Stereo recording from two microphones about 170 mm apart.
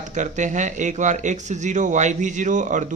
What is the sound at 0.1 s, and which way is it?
A man's voice, 45° right (ahead or behind).